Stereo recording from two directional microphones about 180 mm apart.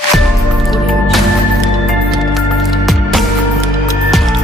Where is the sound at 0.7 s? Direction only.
Centre (ahead or behind).